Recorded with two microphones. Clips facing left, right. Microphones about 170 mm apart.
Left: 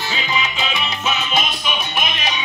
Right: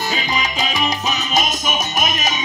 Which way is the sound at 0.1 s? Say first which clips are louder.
Right 1 dB; 40° right (ahead or behind).